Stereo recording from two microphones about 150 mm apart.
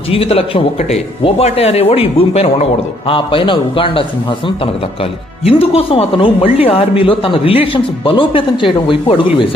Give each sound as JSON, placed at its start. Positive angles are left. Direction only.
{"t": 0.1, "sound": "a man's voice", "side_deg": 40}